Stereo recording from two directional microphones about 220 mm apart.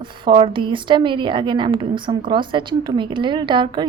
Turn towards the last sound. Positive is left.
turn(degrees=-20)  # may be behind; listen again after turning